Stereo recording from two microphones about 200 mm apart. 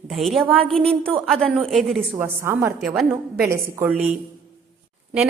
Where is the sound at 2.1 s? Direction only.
10° right (ahead or behind).